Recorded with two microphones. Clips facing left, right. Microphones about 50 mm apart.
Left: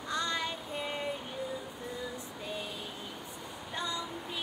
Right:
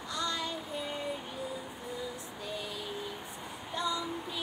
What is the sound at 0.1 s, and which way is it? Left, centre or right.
Music, left.